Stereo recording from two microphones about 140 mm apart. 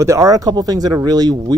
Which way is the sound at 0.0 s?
20° right (ahead or behind).